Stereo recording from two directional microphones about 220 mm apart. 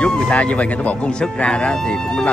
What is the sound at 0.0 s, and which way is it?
Speech, 5° left (ahead or behind).